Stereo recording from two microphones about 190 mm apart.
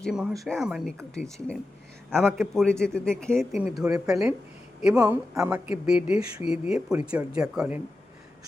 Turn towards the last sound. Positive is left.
turn(degrees=-5)  # may be behind; listen again after turning